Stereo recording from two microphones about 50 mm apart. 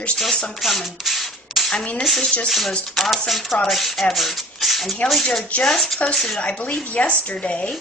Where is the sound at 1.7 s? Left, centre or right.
Left.